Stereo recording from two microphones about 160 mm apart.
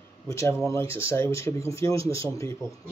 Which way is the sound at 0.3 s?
20° left (ahead or behind).